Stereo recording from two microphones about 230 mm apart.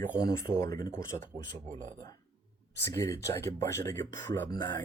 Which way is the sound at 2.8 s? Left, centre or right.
Centre.